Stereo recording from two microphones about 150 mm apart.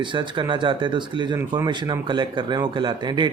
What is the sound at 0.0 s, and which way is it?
Speech, 30° right (ahead or behind).